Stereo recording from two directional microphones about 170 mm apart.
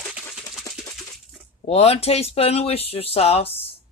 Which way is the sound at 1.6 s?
35° left (ahead or behind).